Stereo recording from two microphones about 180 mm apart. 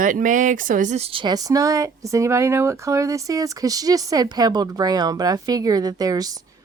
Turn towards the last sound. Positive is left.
turn(degrees=-20)  # may be behind; listen again after turning